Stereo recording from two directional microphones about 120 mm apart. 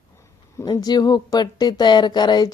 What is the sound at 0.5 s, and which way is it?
A woman's voice, 30° left (ahead or behind).